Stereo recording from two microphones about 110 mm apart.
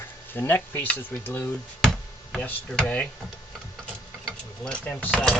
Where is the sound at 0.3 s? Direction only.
20° left (ahead or behind).